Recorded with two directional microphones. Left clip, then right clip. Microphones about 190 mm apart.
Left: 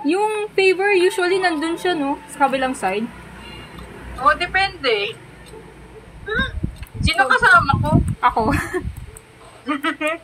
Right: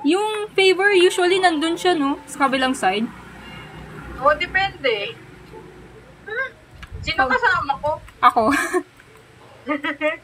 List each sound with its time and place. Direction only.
0.1 s a woman's voice: 15° right (ahead or behind)
4.2 s a woman's voice: 35° left (ahead or behind)
6.2 s a sound: 40° left (ahead or behind)
7.1 s a woman's voice: 35° left (ahead or behind)
8.2 s speech: 25° right (ahead or behind)
9.7 s a woman's voice: 40° left (ahead or behind)